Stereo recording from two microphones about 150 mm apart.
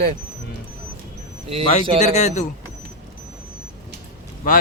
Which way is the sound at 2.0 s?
50° left (ahead or behind).